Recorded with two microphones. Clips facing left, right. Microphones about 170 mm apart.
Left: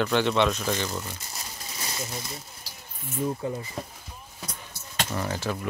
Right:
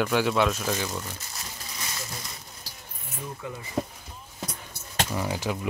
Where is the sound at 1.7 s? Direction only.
30° left (ahead or behind).